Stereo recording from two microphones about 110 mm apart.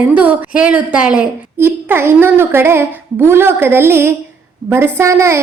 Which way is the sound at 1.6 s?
20° right (ahead or behind).